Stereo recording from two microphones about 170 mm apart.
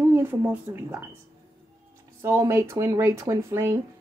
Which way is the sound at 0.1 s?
10° right (ahead or behind).